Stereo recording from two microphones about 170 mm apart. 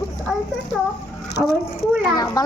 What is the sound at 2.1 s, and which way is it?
Speech, 20° left (ahead or behind).